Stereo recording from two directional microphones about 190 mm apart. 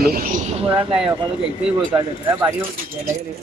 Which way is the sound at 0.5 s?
30° right (ahead or behind).